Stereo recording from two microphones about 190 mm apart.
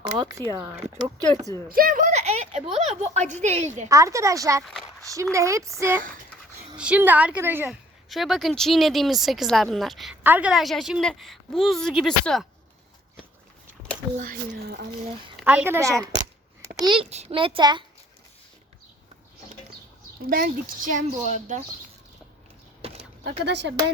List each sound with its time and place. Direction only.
0.0 s a child's voice: 25° right (ahead or behind)
1.7 s a sound: 50° right (ahead or behind)
2.7 s speech: 35° right (ahead or behind)
3.8 s a woman's voice: 15° right (ahead or behind)
4.7 s a sound: centre (ahead or behind)
5.0 s a woman's voice: 15° right (ahead or behind)
8.1 s speech: centre (ahead or behind)
14.2 s speech: 50° right (ahead or behind)
15.4 s a woman's voice: 10° right (ahead or behind)
16.8 s a child's voice: 25° right (ahead or behind)
20.2 s speech: 50° right (ahead or behind)
22.8 s a sound: 30° right (ahead or behind)
23.4 s speech: 65° right (ahead or behind)